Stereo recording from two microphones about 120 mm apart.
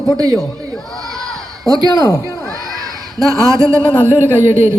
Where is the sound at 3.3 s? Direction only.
25° right (ahead or behind).